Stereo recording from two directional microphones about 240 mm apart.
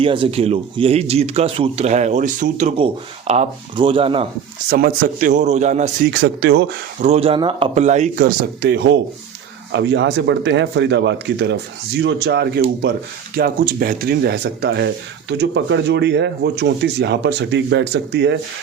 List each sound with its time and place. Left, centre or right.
0.0 s speech: right
4.7 s speech: right
6.1 s speech: right
7.0 s speech: right